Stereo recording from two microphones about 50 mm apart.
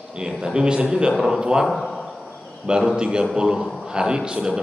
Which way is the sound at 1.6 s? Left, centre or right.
Centre.